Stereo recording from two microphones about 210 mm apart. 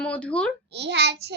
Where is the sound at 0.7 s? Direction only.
55° right (ahead or behind).